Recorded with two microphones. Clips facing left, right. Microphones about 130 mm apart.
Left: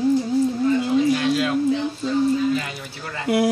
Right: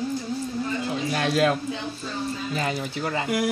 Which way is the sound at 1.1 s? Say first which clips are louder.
Left 2 dB; 50° right (ahead or behind).